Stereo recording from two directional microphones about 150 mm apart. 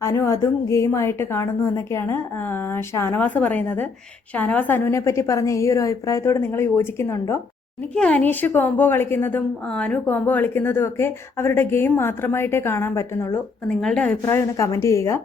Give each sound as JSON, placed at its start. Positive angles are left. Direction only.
{"t": 0.0, "sound": "a woman's voice", "side_deg": 20}
{"t": 13.7, "sound": "a woman's voice", "side_deg": 5}
{"t": 14.2, "sound": "a woman's voice", "side_deg": 20}